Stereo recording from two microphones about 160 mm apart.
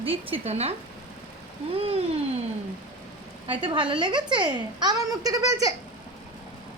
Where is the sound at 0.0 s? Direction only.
35° right (ahead or behind).